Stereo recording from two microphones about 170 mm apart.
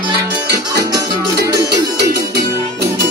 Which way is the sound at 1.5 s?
75° right (ahead or behind).